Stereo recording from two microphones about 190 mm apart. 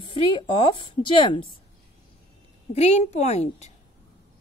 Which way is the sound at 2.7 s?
35° left (ahead or behind).